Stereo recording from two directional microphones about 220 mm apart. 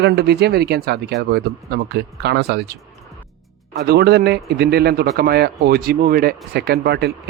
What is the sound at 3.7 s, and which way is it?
Speech, 45° right (ahead or behind).